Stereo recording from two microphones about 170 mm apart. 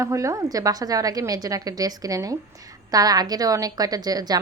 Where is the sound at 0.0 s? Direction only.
20° right (ahead or behind).